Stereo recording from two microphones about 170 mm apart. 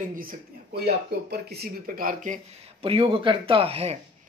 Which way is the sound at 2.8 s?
30° right (ahead or behind).